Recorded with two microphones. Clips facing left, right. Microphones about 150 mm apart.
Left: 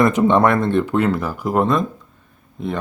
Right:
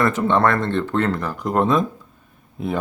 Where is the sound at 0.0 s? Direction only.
15° left (ahead or behind).